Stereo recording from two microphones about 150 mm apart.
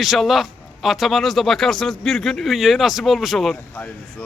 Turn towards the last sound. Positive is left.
turn(degrees=5)  # may be behind; listen again after turning